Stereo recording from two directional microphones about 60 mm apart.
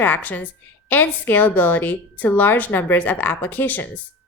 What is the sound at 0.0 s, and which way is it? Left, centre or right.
A woman's voice, left.